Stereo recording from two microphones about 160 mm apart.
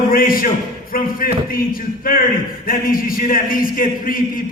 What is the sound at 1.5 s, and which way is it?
A man's voice, 65° left (ahead or behind).